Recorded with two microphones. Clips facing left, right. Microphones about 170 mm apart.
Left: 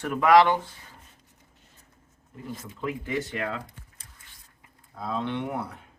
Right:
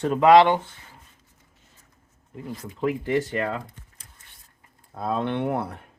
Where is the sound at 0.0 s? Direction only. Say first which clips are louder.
Right 4 dB; 25° right (ahead or behind).